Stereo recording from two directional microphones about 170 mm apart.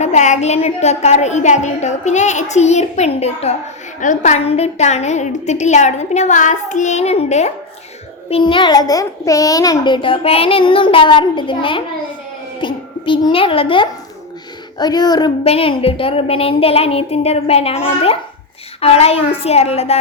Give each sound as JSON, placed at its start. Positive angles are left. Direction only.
{"t": 0.0, "sound": "a woman's voice", "side_deg": 45}
{"t": 8.3, "sound": "a child's voice", "side_deg": 30}